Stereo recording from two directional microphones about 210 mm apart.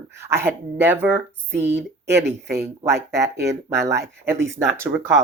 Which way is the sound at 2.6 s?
15° right (ahead or behind).